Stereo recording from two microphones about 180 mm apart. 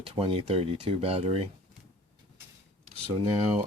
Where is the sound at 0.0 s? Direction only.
35° right (ahead or behind).